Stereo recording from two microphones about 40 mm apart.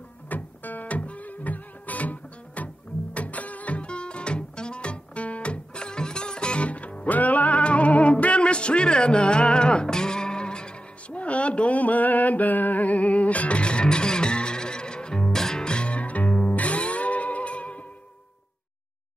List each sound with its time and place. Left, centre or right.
0.3 s music: left
7.1 s music: left